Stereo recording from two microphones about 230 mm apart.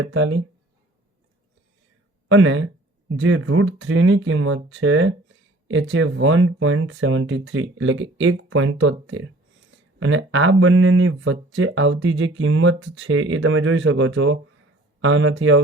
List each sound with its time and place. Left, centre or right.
0.0 s speech: right
2.3 s speech: right